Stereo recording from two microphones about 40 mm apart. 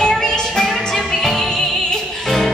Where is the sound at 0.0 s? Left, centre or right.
Centre.